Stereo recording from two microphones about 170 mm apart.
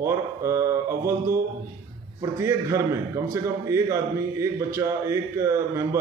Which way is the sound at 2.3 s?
15° right (ahead or behind).